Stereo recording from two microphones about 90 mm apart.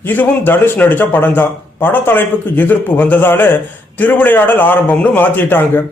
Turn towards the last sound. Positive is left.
turn(degrees=25)  # may be behind; listen again after turning